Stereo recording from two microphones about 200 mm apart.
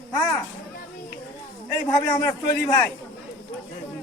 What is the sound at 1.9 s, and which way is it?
Speech, 15° left (ahead or behind).